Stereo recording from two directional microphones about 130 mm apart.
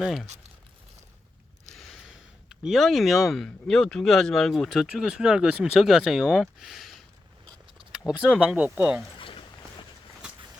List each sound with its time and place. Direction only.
0.0 s speech: centre (ahead or behind)
1.7 s speech: centre (ahead or behind)
9.1 s a sound: 40° left (ahead or behind)